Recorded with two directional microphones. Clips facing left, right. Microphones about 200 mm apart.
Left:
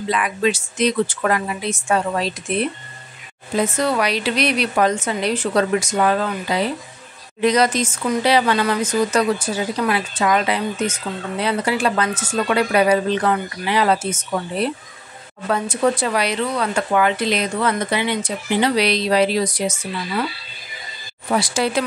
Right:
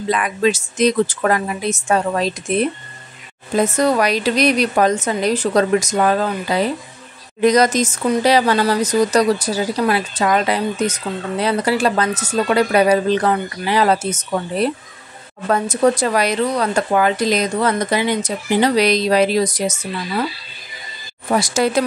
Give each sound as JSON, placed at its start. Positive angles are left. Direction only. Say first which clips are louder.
{"t": 0.1, "sound": "speech", "louder": "right 3 dB", "side_deg": -45}
{"t": 21.3, "sound": "speech", "louder": "right 3 dB", "side_deg": -45}